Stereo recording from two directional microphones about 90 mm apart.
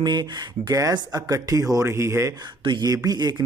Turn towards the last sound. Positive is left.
turn(degrees=-45)  # may be behind; listen again after turning